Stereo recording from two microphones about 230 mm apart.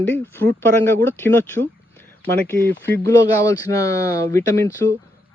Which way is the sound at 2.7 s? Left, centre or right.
Centre.